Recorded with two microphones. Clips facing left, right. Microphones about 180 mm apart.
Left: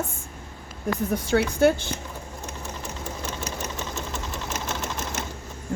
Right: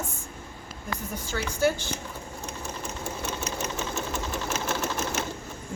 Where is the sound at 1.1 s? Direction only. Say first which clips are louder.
Left 11 dB; 65° left (ahead or behind).